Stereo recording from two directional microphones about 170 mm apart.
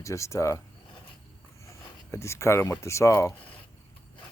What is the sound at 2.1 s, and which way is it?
Speech, 15° left (ahead or behind).